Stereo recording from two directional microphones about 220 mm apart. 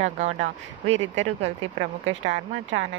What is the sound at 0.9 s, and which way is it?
Speech, 55° right (ahead or behind).